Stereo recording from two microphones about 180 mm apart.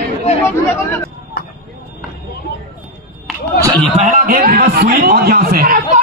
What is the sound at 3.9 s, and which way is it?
A man's voice, 45° right (ahead or behind).